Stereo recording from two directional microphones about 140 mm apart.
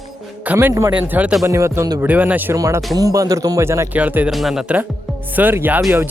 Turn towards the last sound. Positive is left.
turn(degrees=-15)  # may be behind; listen again after turning